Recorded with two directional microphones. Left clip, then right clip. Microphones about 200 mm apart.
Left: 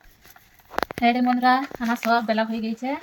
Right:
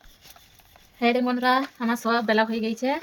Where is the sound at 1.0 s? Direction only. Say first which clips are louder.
Left 2 dB; 50° right (ahead or behind).